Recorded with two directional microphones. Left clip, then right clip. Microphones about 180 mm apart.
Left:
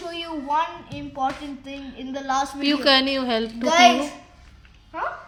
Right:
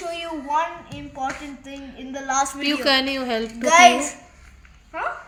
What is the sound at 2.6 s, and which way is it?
Speech, 5° left (ahead or behind).